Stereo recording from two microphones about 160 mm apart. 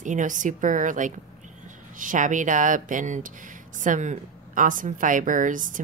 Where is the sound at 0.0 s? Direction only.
50° right (ahead or behind).